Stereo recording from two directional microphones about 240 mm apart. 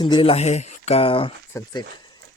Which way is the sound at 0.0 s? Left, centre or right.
Left.